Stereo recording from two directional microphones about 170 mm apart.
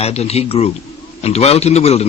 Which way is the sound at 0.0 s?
40° left (ahead or behind).